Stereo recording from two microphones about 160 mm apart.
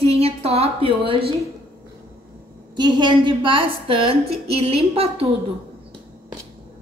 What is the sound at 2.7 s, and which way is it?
A woman's voice, 30° right (ahead or behind).